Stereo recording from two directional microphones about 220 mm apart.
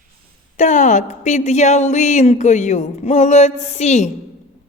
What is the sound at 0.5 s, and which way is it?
Speech, 35° left (ahead or behind).